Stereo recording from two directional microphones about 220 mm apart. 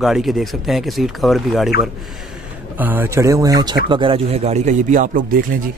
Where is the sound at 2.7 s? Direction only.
10° right (ahead or behind); by 5.6 s 40° right (ahead or behind).